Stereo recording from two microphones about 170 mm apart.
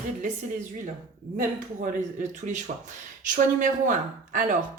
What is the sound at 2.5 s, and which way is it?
Speech, 50° right (ahead or behind).